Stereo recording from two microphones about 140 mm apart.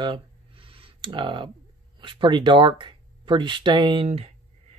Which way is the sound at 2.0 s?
35° right (ahead or behind).